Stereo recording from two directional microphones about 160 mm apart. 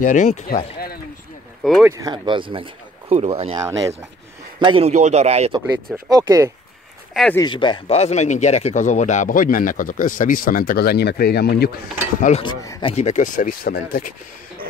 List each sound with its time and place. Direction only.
0.0 s speech: 50° left (ahead or behind)
1.6 s speech: centre (ahead or behind)
1.9 s speech: 25° right (ahead or behind)
3.5 s speech: 20° right (ahead or behind)
4.6 s speech: 40° right (ahead or behind)
6.0 s speech: 20° right (ahead or behind)
7.3 s speech: 30° left (ahead or behind); by 11.7 s 80° left
12.2 s mechanisms: 40° left (ahead or behind)
12.4 s speech: 30° left (ahead or behind)
12.9 s speech: 50° left (ahead or behind)